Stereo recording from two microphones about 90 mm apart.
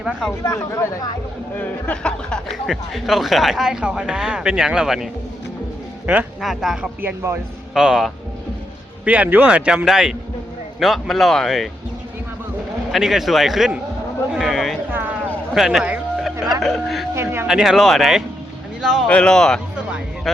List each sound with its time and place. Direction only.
0.0 s speech: 10° right (ahead or behind)
0.4 s speech: 40° left (ahead or behind)
1.5 s speech: 15° left (ahead or behind)
2.6 s speech: centre (ahead or behind)
6.1 s speech: 10° right (ahead or behind)
9.0 s speech: 15° right (ahead or behind); by 11.7 s 5° left (ahead or behind)
12.9 s speech: centre (ahead or behind)
16.1 s a sound: centre (ahead or behind)
16.6 s speech: 5° left (ahead or behind)
19.0 s speech: 10° left (ahead or behind)